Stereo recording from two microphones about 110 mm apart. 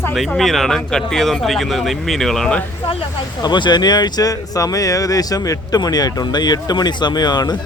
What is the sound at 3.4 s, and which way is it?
Speech, 40° left (ahead or behind).